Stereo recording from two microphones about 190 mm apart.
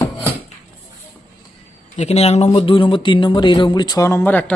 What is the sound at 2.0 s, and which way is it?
Speech, 35° left (ahead or behind).